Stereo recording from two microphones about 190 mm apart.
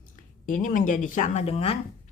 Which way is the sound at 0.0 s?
45° left (ahead or behind).